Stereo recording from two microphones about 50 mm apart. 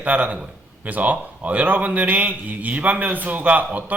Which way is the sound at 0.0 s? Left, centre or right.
Right.